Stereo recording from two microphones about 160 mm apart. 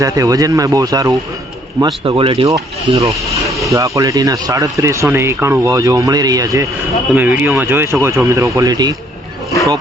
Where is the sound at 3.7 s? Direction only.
20° right (ahead or behind).